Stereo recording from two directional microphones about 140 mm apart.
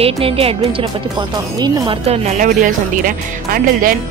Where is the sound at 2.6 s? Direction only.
75° right (ahead or behind).